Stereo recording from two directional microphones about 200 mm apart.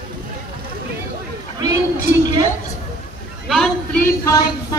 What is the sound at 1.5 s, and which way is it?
Speech, 20° right (ahead or behind).